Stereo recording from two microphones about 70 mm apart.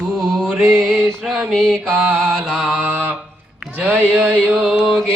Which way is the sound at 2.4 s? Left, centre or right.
Centre.